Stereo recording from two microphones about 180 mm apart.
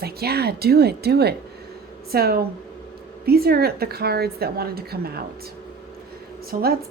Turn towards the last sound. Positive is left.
turn(degrees=-50)  # may be behind; listen again after turning